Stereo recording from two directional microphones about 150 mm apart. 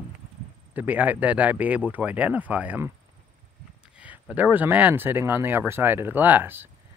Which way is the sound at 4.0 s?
10° right (ahead or behind).